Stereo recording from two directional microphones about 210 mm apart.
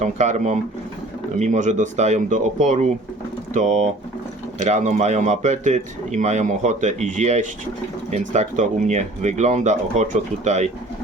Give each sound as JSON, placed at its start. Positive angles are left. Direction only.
{"t": 0.0, "sound": "a man's voice", "side_deg": -35}